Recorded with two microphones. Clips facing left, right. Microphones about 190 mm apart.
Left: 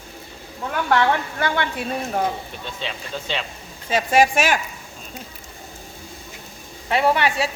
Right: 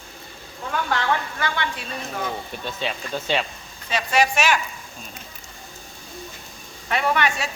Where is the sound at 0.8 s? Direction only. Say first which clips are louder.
Left 6 dB; 55° left (ahead or behind).